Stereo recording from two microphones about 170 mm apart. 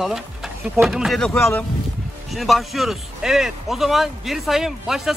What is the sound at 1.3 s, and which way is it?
Speech, 15° left (ahead or behind).